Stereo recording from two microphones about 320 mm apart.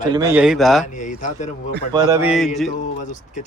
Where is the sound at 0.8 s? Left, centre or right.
Left.